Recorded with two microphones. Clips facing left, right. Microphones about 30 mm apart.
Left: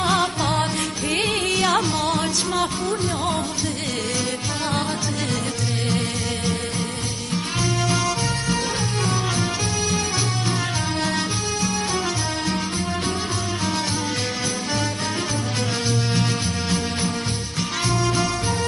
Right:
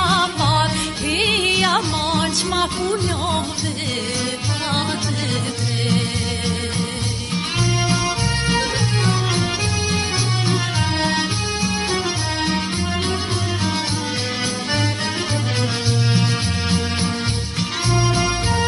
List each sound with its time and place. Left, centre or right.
0.0 s music: right
1.1 s music: right
1.5 s music: right
2.1 s music: right
8.5 s music: right
17.9 s music: right